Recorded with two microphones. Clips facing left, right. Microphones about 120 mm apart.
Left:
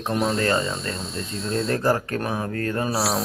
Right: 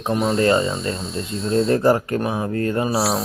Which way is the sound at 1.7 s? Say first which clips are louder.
Right 5 dB; 20° right (ahead or behind).